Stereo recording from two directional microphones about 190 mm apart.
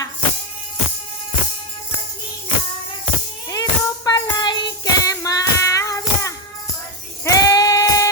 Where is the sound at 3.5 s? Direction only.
20° left (ahead or behind).